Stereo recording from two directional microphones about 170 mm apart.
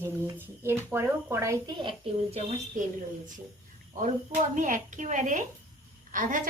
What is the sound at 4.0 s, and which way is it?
A woman's voice, 45° right (ahead or behind).